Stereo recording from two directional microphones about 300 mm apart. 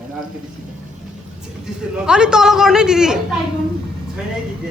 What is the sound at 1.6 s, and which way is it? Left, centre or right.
A man's voice, centre.